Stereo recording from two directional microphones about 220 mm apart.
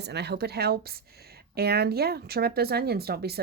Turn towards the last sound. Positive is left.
turn(degrees=-45)  # may be behind; listen again after turning